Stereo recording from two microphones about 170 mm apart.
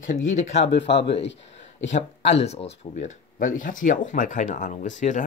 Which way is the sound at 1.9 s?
40° left (ahead or behind).